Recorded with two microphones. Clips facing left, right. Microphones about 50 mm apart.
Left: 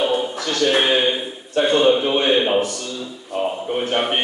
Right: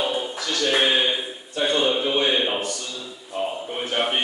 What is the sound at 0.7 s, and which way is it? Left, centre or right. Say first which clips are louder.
A man's voice: left 3 dB; centre.